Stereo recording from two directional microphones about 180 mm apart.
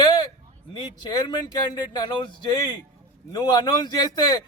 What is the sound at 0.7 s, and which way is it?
Speech, 25° left (ahead or behind).